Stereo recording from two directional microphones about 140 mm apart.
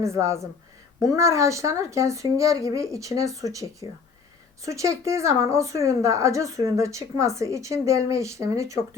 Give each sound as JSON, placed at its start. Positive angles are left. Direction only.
{"t": 0.0, "sound": "a woman's voice", "side_deg": -20}